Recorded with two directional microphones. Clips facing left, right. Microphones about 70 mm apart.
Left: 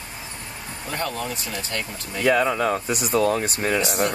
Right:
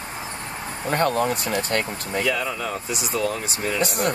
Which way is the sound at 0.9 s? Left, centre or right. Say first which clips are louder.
Right 7 dB; right.